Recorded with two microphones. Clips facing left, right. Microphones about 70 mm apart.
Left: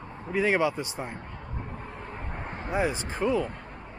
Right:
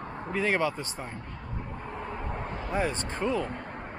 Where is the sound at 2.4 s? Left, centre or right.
Left.